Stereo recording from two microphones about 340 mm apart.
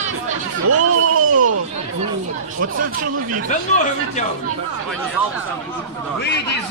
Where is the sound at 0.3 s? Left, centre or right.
Right.